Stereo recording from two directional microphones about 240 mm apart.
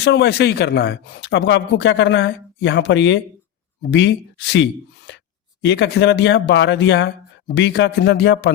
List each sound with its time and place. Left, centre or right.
0.0 s speech: left